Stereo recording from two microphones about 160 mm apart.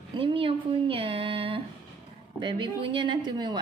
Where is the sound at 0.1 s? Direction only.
30° right (ahead or behind).